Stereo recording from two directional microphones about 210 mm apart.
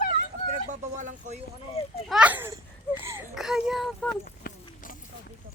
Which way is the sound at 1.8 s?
30° left (ahead or behind).